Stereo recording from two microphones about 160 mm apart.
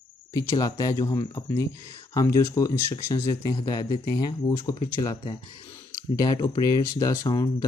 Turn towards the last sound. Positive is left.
turn(degrees=25)  # may be behind; listen again after turning